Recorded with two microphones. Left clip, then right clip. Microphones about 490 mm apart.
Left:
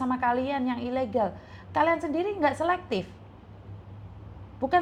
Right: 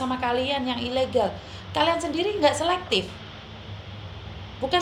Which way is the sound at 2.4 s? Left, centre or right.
Left.